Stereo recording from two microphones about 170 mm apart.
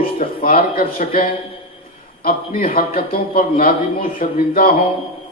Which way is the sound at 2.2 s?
55° left (ahead or behind).